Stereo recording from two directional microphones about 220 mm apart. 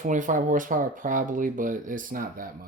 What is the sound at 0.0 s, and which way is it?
Speech, 35° right (ahead or behind).